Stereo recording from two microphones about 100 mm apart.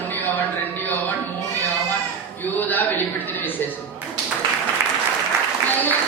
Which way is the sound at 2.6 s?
15° left (ahead or behind).